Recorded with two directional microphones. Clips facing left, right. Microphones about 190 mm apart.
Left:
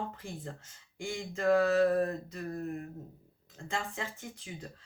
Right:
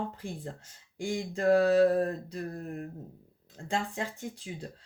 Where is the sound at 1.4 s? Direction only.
35° right (ahead or behind).